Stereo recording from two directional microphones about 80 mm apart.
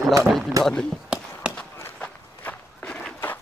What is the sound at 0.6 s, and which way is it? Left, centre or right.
Speech, right.